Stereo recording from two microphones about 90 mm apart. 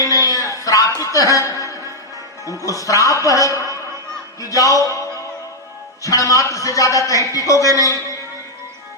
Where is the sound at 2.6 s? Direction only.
40° left (ahead or behind).